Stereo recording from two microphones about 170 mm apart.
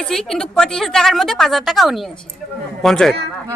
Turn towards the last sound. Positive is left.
turn(degrees=0)  # may be behind; listen again after turning